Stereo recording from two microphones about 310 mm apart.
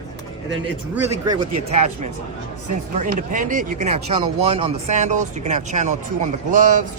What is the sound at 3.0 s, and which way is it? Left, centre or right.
Speech, right.